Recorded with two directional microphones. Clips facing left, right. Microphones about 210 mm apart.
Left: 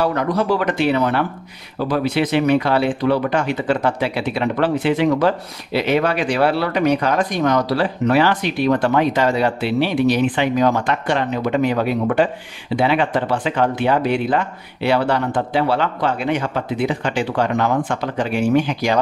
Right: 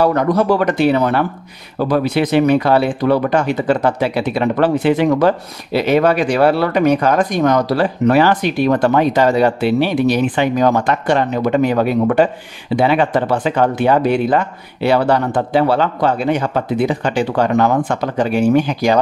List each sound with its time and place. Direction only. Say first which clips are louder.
0.0 s speech: right 5 dB; 45° right (ahead or behind)